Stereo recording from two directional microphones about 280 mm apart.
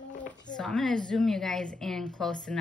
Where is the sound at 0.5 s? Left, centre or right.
Centre.